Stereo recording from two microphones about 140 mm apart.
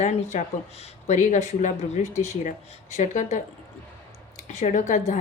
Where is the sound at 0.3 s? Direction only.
55° left (ahead or behind).